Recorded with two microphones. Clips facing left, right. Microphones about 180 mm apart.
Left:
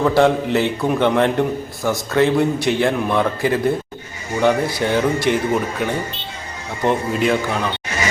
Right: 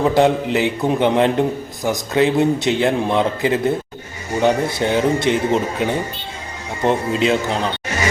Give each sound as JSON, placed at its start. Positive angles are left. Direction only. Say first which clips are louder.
{"t": 0.0, "sound": "a man's voice", "louder": "even", "side_deg": -15}